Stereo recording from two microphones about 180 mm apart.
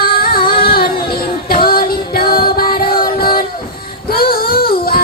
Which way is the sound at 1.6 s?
55° left (ahead or behind).